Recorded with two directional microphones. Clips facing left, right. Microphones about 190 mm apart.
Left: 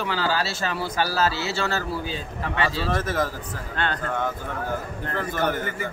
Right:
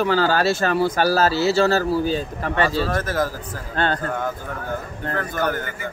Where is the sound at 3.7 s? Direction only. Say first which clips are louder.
Right 6 dB; 35° right (ahead or behind).